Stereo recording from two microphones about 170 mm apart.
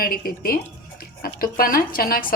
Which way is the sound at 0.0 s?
60° left (ahead or behind).